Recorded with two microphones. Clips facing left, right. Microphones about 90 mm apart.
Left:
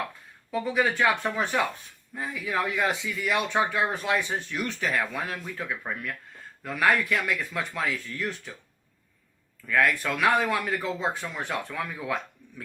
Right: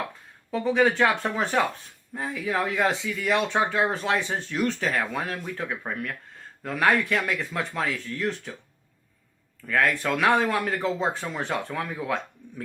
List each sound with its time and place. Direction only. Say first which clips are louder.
0.5 s speech: right 4 dB; 30° right (ahead or behind)
9.6 s speech: right 1 dB; 30° right (ahead or behind)